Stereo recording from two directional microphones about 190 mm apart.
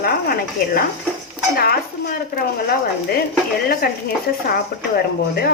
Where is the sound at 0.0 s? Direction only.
50° left (ahead or behind).